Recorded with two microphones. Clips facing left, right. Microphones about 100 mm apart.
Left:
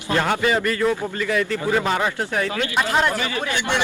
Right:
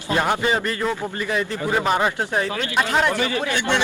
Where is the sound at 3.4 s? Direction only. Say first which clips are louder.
Right 1 dB; 15° left (ahead or behind).